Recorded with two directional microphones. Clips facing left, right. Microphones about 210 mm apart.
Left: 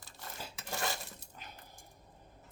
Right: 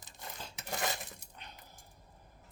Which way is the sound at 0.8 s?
20° right (ahead or behind).